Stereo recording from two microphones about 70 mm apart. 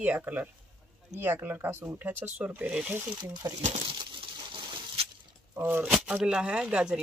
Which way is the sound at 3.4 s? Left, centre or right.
Right.